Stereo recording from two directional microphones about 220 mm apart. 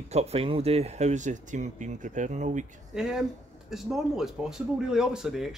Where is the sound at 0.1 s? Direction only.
30° right (ahead or behind).